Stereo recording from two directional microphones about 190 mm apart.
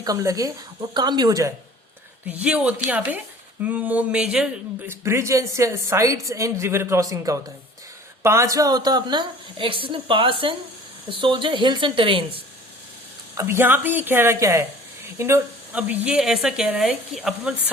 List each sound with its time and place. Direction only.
0.0 s a woman's voice: 20° right (ahead or behind)
2.2 s a woman's voice: 5° right (ahead or behind); by 12.2 s 25° right (ahead or behind)
13.3 s speech: 15° right (ahead or behind)